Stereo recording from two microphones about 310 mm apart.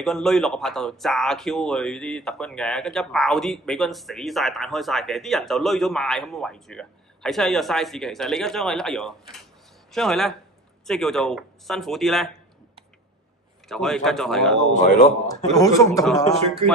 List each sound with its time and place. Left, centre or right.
0.0 s speech: centre
13.7 s speech: centre
14.7 s speech: left
15.2 s a man's voice: centre